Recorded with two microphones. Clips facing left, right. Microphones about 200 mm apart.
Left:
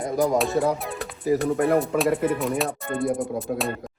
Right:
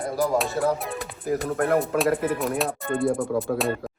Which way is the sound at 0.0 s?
Centre (ahead or behind).